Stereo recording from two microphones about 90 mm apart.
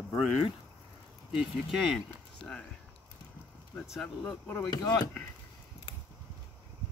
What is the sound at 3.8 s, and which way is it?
Speech, centre (ahead or behind).